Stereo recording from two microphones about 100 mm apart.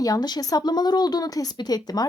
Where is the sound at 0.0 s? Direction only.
40° left (ahead or behind).